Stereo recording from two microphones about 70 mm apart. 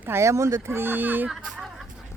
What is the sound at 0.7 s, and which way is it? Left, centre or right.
Speech, right.